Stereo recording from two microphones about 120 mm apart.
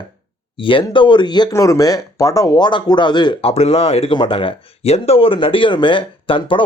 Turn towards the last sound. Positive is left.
turn(degrees=45)  # may be behind; listen again after turning